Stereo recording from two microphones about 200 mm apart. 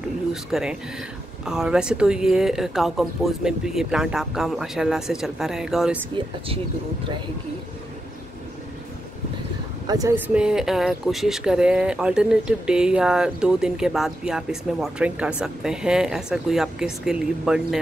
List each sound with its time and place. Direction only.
0.3 s speech: centre (ahead or behind)
6.1 s speech: 30° right (ahead or behind)
9.8 s speech: 15° right (ahead or behind)